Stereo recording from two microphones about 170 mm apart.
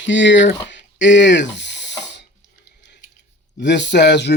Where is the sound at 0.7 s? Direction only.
90° left.